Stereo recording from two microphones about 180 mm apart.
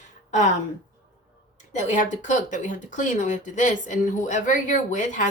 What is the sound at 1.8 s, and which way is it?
Speech, 45° left (ahead or behind).